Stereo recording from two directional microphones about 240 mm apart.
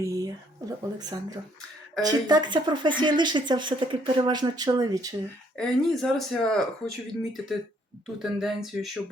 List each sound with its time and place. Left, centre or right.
0.0 s speech: centre
5.5 s speech: centre